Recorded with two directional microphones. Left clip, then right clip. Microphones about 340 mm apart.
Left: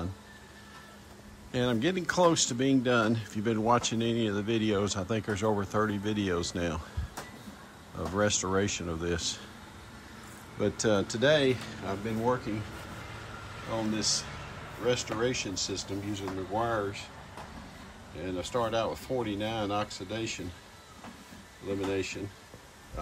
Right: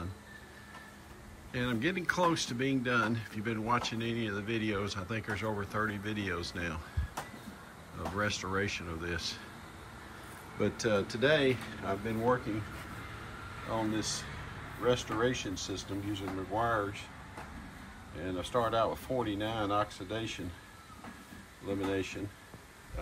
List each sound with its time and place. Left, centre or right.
1.5 s speech: centre
8.2 s speech: centre
10.6 s speech: centre
13.7 s speech: centre
18.2 s speech: centre
21.6 s speech: centre